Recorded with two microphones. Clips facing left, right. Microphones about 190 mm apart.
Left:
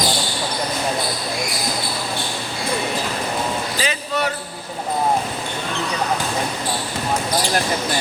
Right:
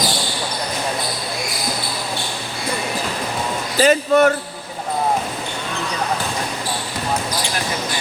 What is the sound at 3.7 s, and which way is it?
Speech, 50° right (ahead or behind).